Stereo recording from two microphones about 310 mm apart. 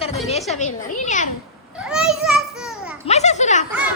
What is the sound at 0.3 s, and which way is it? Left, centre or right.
Speech, left.